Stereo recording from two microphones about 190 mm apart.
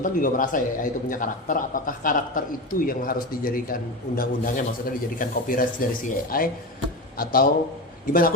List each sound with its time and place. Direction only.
0.0 s a man's voice: 45° left (ahead or behind)